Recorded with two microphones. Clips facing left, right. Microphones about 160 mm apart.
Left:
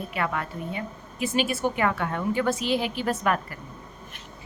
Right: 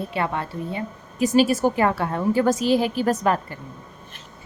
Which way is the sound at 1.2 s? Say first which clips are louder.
Right 7 dB; 40° right (ahead or behind).